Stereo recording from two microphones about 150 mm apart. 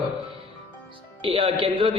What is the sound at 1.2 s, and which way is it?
Speech, 35° right (ahead or behind).